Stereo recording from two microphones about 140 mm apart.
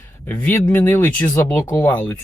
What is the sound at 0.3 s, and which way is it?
Speech, 15° left (ahead or behind).